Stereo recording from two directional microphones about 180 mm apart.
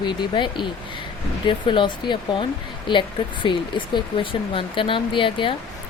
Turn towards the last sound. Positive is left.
turn(degrees=30)  # may be behind; listen again after turning